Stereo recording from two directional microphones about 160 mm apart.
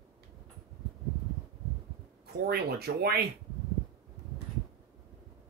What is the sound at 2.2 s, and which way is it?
Speech, 85° right.